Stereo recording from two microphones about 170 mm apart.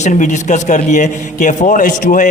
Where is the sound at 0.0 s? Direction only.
45° left (ahead or behind).